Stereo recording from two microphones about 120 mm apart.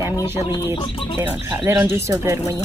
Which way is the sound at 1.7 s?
20° right (ahead or behind).